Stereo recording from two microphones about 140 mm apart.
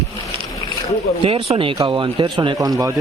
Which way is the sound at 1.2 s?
40° right (ahead or behind).